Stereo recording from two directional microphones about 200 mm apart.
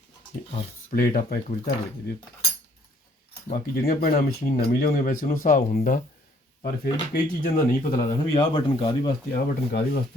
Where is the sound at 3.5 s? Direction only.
50° left (ahead or behind).